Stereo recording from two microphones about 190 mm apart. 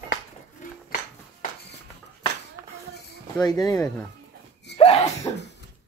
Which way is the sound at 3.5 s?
20° left (ahead or behind).